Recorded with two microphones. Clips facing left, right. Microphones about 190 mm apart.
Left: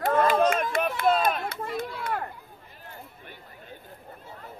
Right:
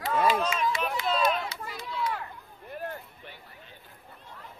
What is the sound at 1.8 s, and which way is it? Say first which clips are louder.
Children playing: right 1 dB; 55° left (ahead or behind).